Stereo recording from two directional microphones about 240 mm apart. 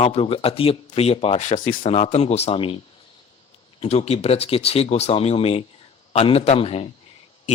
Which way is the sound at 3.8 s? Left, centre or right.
Left.